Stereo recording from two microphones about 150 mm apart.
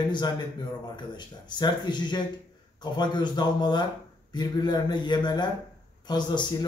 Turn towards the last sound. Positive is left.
turn(degrees=30)  # may be behind; listen again after turning